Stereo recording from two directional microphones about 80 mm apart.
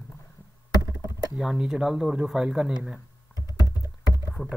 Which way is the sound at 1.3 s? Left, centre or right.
Centre.